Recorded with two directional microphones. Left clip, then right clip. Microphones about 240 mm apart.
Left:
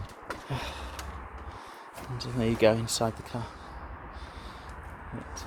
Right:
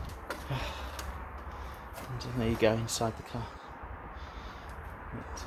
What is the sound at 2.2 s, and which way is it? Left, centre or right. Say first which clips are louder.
Speech: left 4 dB; left.